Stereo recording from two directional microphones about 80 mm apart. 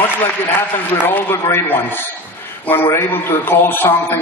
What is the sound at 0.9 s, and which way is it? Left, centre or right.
A man's voice, left.